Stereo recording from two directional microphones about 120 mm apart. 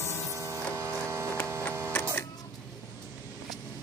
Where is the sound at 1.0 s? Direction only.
25° right (ahead or behind).